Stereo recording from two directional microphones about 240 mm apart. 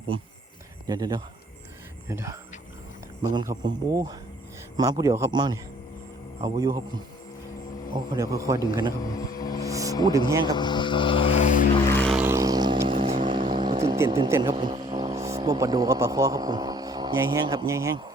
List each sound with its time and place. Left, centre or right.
0.9 s a man's voice: centre
8.1 s a man's voice: centre
9.1 s vehicle: centre
9.6 s a sound: centre
10.1 s a man's voice: centre
10.4 s vehicle: centre
11.9 s vehicle: centre
12.1 s vehicle: centre
15.4 s a man's voice: centre